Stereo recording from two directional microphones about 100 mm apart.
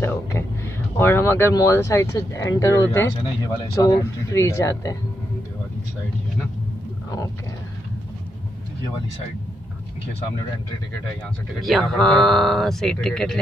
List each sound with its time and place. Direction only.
0.0 s a sound: 25° left (ahead or behind)
0.9 s speech: 25° left (ahead or behind)
11.6 s speech: centre (ahead or behind)